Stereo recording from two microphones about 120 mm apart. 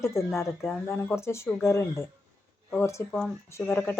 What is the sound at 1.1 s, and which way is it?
Speech, 20° left (ahead or behind).